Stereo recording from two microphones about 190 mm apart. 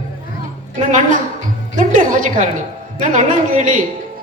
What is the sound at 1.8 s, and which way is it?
Music, 45° right (ahead or behind).